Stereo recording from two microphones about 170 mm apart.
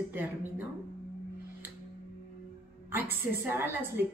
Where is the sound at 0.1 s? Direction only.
10° right (ahead or behind).